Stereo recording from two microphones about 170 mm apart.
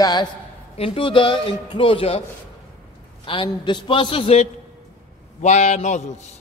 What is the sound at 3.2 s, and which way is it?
A man's voice, 30° left (ahead or behind).